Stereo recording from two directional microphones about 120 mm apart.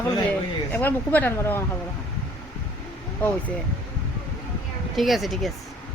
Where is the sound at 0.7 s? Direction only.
15° left (ahead or behind).